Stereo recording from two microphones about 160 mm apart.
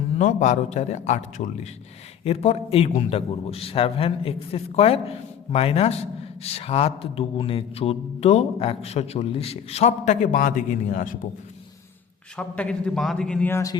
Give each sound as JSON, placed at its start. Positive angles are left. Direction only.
{"t": 0.2, "sound": "a man's voice", "side_deg": 50}
{"t": 12.4, "sound": "a man's voice", "side_deg": 5}